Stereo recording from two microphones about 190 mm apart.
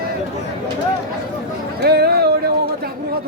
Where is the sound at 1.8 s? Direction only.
55° right (ahead or behind).